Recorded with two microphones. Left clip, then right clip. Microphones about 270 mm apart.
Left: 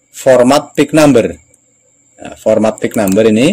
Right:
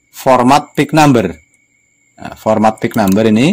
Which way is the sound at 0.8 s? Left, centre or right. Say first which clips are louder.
Left 2 dB; right.